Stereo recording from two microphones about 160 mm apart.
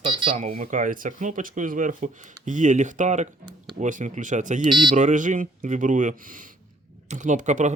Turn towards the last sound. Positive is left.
turn(degrees=-50)  # may be behind; listen again after turning